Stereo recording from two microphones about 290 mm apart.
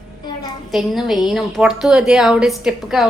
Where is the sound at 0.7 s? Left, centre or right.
Centre.